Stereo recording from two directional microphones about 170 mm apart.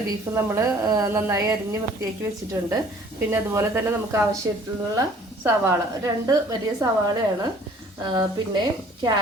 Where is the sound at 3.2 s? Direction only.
15° right (ahead or behind).